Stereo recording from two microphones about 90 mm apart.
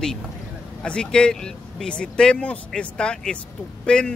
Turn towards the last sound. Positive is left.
turn(degrees=10)  # may be behind; listen again after turning